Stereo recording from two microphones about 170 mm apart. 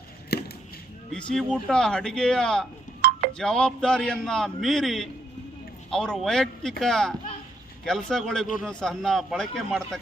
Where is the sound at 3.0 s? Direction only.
60° right (ahead or behind).